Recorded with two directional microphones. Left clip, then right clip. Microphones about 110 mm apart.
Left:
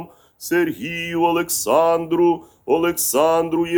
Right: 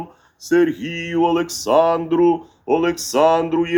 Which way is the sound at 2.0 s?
30° left (ahead or behind).